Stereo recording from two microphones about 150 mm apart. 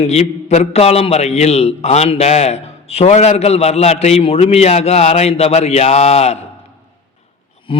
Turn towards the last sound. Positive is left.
turn(degrees=35)  # may be behind; listen again after turning